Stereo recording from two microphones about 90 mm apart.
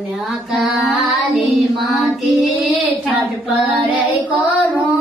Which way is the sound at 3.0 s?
15° right (ahead or behind).